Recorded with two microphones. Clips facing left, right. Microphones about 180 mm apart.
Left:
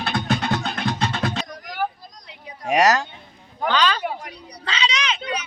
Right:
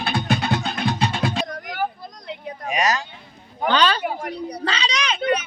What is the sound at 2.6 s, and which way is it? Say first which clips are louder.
Speech: left 5 dB; 75° left (ahead or behind).